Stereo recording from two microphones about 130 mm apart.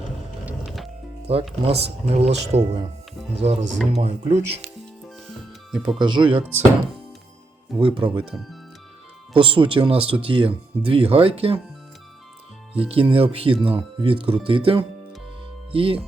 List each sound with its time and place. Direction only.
0.4 s music: 5° right (ahead or behind)
1.3 s speech: 45° right (ahead or behind)
5.7 s speech: 5° right (ahead or behind)
6.0 s speech: 35° right (ahead or behind)
7.8 s speech: 40° right (ahead or behind)
12.9 s speech: 45° right (ahead or behind)